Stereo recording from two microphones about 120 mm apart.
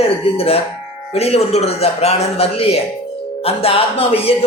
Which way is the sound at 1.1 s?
60° left (ahead or behind).